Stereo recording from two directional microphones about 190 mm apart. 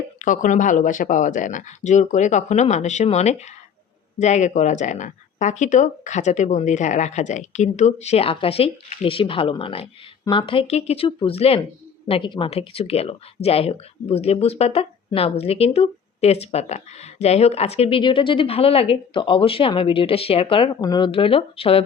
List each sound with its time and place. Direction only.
0.2 s speech: 40° left (ahead or behind)